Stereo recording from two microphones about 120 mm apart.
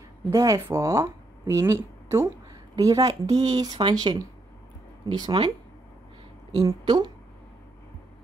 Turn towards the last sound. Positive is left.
turn(degrees=-35)  # may be behind; listen again after turning